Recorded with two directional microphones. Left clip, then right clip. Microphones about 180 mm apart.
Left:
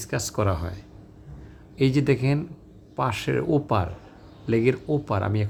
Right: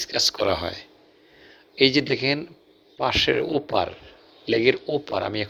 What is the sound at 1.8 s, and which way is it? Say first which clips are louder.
Speech: right 3 dB; 15° right (ahead or behind).